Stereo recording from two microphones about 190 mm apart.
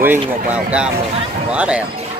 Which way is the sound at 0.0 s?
10° right (ahead or behind).